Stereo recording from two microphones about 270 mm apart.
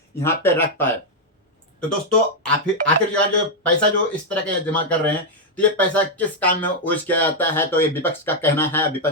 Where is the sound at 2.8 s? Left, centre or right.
Right.